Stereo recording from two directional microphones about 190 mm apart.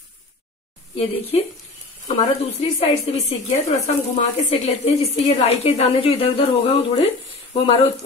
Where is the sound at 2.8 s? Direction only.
30° left (ahead or behind).